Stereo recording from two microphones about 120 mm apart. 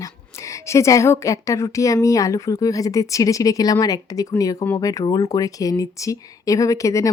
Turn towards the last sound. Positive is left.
turn(degrees=25)  # may be behind; listen again after turning